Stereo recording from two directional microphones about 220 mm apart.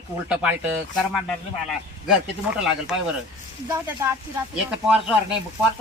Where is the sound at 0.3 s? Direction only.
5° right (ahead or behind).